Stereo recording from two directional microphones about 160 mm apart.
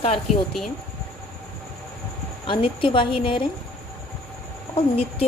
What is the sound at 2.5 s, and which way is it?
A woman's voice, 30° left (ahead or behind).